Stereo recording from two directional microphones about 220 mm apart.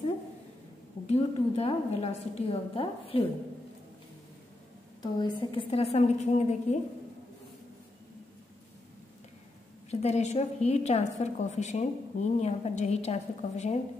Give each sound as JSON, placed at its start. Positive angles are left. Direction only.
{"t": 1.0, "sound": "a woman's voice", "side_deg": 30}
{"t": 5.0, "sound": "a woman's voice", "side_deg": 20}
{"t": 9.8, "sound": "a woman's voice", "side_deg": 30}